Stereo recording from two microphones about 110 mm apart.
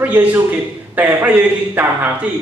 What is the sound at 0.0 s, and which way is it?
A man's voice, 15° right (ahead or behind).